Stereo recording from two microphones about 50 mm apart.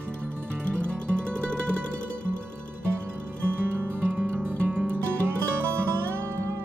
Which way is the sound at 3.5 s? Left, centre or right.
Right.